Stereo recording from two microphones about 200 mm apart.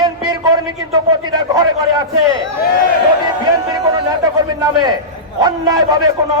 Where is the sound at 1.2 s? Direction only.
20° right (ahead or behind).